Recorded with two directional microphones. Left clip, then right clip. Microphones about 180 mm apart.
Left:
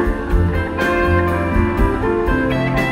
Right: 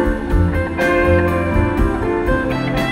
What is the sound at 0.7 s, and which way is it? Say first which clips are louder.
Music: right 2 dB; 30° right (ahead or behind).